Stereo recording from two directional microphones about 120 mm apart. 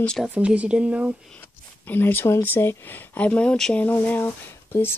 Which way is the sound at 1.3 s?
15° left (ahead or behind).